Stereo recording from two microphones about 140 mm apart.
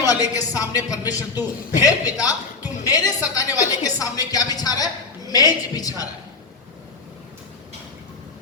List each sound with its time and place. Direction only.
0.0 s a man's voice: 25° left (ahead or behind)